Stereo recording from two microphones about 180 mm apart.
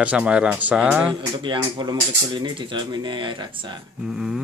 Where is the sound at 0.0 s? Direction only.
5° right (ahead or behind).